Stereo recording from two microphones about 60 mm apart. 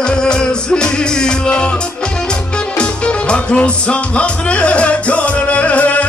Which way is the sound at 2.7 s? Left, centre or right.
Centre.